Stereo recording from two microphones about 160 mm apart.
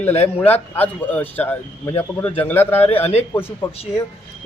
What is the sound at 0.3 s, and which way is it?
Speech, 10° left (ahead or behind).